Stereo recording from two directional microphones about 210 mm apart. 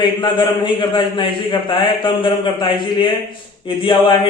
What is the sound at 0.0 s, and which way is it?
A man's voice, 25° left (ahead or behind).